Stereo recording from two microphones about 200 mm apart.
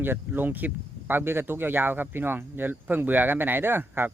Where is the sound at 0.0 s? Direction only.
10° right (ahead or behind).